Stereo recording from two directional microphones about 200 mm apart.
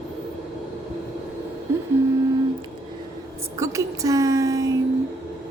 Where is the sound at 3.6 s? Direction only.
15° right (ahead or behind).